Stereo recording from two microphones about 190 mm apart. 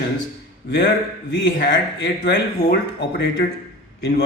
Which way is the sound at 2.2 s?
55° left (ahead or behind).